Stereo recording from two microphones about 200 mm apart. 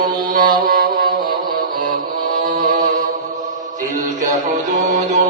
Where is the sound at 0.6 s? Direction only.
45° right (ahead or behind).